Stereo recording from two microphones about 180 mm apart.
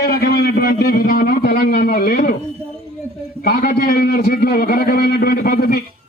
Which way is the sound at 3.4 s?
50° left (ahead or behind).